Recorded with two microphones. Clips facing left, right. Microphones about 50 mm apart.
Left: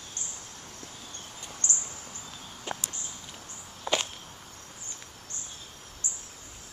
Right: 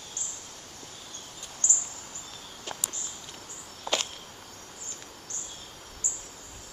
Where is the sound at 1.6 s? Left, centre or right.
Left.